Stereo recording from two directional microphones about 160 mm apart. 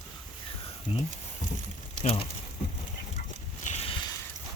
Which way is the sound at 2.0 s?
35° left (ahead or behind).